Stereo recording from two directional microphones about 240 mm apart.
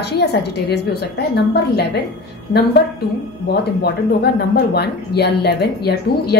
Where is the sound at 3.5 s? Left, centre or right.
Left.